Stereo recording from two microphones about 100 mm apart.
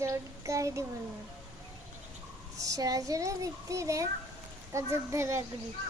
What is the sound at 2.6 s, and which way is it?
A child's voice, 35° right (ahead or behind).